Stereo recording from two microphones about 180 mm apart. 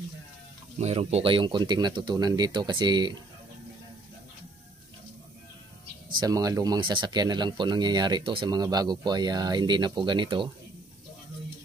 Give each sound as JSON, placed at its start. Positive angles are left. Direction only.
{"t": 0.7, "sound": "speech", "side_deg": -35}
{"t": 6.1, "sound": "speech", "side_deg": -20}